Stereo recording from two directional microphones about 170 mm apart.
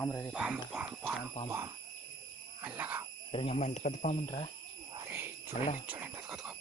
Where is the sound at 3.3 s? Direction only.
35° left (ahead or behind).